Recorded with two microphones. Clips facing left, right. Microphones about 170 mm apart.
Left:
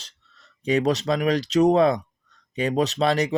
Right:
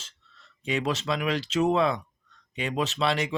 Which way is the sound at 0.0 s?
40° left (ahead or behind).